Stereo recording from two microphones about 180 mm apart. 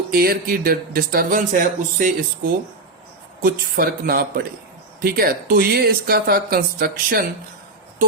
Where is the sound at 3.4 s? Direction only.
50° right (ahead or behind).